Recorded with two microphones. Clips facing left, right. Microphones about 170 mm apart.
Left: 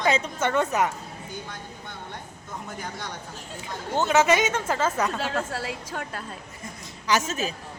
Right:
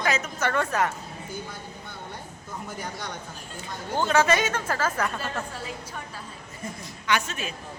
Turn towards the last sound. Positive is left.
turn(degrees=40)  # may be behind; listen again after turning